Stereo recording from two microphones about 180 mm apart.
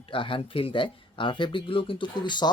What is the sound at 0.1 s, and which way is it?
Speech, 30° left (ahead or behind).